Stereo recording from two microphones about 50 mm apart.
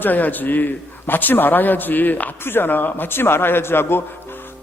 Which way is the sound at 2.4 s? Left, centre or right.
Left.